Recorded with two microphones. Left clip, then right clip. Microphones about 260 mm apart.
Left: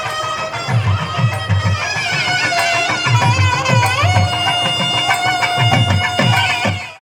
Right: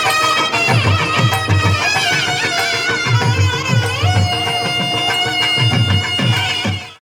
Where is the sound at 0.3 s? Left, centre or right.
Right.